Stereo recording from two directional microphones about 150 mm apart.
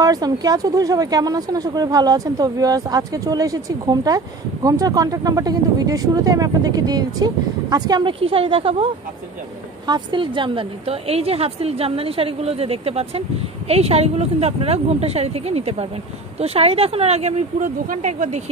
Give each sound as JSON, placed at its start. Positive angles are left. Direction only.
{"t": 0.0, "sound": "a woman's voice", "side_deg": -25}